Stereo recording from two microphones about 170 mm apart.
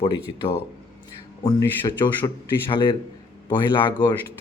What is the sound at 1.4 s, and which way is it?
Speech, 25° left (ahead or behind).